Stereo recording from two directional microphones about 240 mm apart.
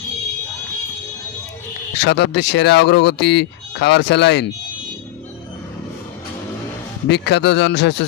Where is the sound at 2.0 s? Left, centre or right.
Left.